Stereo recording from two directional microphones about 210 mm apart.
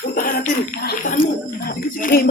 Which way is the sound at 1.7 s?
45° left (ahead or behind).